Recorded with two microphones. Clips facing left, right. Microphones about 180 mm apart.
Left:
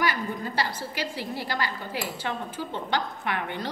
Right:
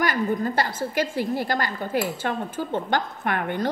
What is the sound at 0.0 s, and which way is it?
A woman's voice, 50° right (ahead or behind).